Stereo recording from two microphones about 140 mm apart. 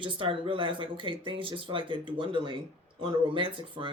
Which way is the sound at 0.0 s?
40° right (ahead or behind).